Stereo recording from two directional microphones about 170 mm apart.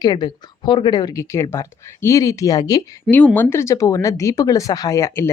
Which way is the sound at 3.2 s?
10° left (ahead or behind).